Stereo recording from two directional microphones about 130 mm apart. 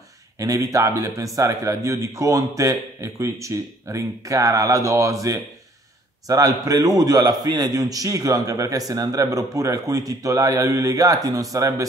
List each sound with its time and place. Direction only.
0.4 s a man's voice: 25° right (ahead or behind)